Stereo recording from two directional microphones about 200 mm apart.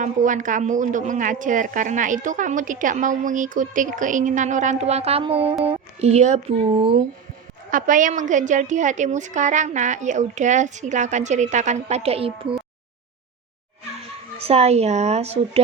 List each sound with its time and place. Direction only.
0.0 s a woman's voice: 40° right (ahead or behind)
7.7 s a woman's voice: 40° right (ahead or behind)
14.3 s a woman's voice: 30° right (ahead or behind)